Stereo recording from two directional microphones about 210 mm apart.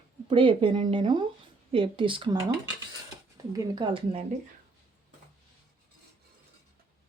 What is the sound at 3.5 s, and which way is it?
Speech, 20° right (ahead or behind).